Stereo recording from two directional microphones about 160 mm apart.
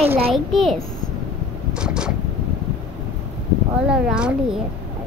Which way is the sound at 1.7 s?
5° right (ahead or behind).